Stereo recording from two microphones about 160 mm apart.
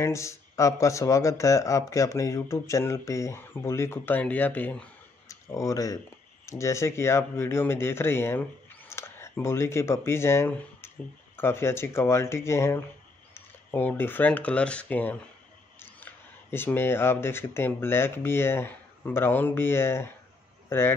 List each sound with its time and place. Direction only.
0.0 s speech: 20° left (ahead or behind)